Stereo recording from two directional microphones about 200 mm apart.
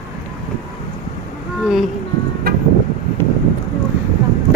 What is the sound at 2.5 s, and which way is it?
Vehicle, 50° right (ahead or behind).